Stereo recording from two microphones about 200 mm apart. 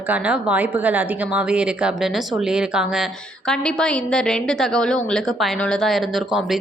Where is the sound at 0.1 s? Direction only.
5° right (ahead or behind).